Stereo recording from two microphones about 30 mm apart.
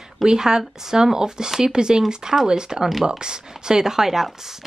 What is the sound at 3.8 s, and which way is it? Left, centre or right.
Speech, centre.